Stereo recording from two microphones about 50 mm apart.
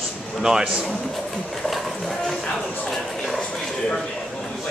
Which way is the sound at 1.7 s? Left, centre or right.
Centre.